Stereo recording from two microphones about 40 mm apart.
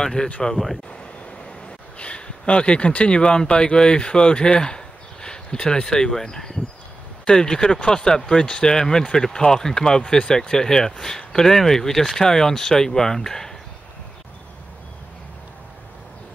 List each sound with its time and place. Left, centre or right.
0.0 s speech: centre
2.0 s speech: left; by 13.6 s centre